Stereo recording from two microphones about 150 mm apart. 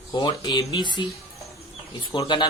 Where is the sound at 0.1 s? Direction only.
30° left (ahead or behind).